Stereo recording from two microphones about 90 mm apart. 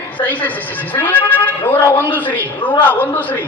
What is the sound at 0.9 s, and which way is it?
A man's voice, 20° left (ahead or behind).